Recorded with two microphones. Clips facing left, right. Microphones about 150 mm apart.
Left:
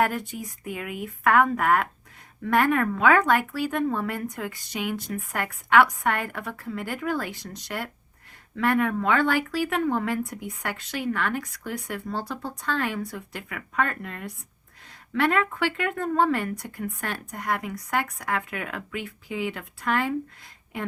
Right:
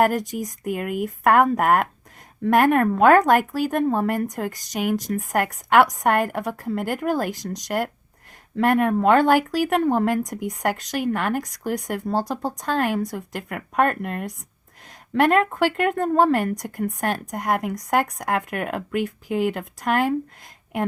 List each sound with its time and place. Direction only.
0.1 s speech: 40° right (ahead or behind)
0.7 s speech: 55° right (ahead or behind)